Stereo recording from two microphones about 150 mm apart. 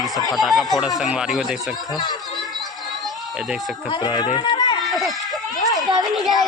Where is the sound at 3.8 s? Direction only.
30° left (ahead or behind).